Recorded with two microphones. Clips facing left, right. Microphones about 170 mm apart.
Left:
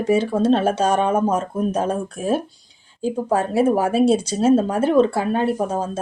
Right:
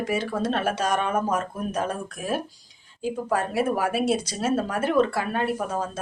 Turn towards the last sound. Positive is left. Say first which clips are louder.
# left 6 dB
turn(degrees=30)  # may be behind; listen again after turning